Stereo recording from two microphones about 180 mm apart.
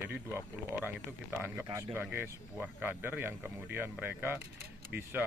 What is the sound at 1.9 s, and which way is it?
Speech, 10° right (ahead or behind).